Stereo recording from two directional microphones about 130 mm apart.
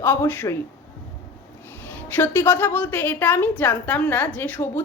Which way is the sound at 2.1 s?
15° left (ahead or behind).